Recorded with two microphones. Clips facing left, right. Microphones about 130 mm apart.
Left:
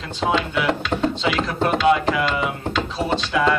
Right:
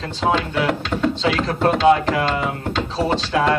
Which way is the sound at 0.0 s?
35° right (ahead or behind).